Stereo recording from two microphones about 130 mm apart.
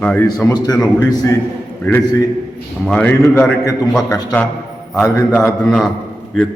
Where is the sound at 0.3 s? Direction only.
30° left (ahead or behind).